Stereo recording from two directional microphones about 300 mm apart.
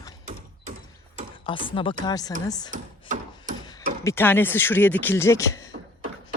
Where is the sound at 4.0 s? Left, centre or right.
Centre.